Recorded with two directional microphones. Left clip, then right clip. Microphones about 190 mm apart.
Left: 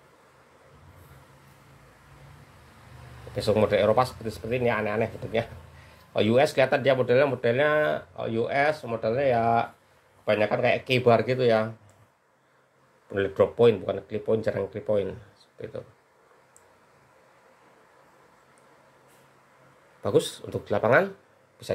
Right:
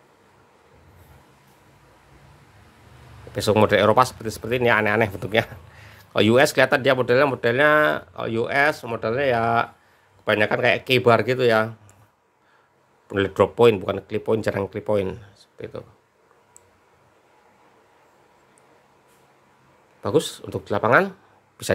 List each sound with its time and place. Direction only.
3.3 s speech: 35° right (ahead or behind)
13.1 s speech: 35° right (ahead or behind)
20.0 s speech: 20° right (ahead or behind)
21.6 s speech: 40° right (ahead or behind)